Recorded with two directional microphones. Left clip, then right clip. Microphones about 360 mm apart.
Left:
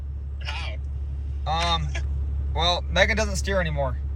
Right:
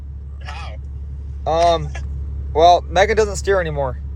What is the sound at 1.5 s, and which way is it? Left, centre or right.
Speech, right.